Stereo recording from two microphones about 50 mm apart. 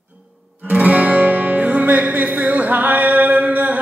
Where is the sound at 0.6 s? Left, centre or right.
Right.